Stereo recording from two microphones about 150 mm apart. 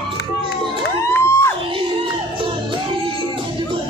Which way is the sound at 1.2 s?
15° left (ahead or behind).